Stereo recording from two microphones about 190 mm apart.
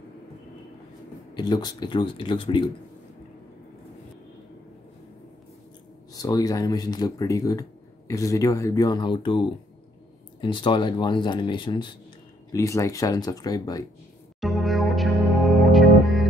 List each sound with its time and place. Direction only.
1.3 s speech: 20° left (ahead or behind)
6.1 s speech: 20° left (ahead or behind)
14.4 s music: centre (ahead or behind)